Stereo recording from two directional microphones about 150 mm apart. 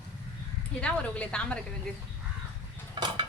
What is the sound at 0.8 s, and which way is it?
Speech, 5° left (ahead or behind).